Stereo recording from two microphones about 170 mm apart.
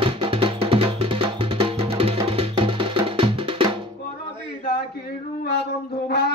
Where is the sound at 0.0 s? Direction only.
30° right (ahead or behind).